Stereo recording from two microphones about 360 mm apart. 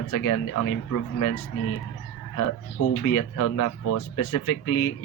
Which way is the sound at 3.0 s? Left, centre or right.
Left.